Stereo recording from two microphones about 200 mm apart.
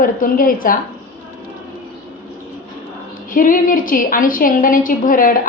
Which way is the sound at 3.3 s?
45° left (ahead or behind).